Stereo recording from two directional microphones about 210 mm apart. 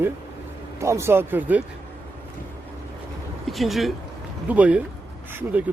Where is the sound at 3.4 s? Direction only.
Centre (ahead or behind).